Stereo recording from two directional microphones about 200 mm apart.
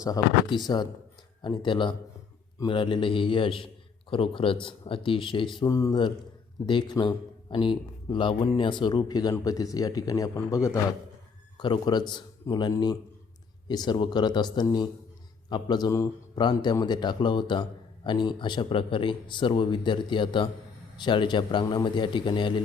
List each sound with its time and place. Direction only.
0.0 s a man's voice: 20° left (ahead or behind)